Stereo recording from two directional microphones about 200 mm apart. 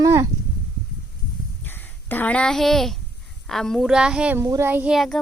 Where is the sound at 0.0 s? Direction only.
15° right (ahead or behind).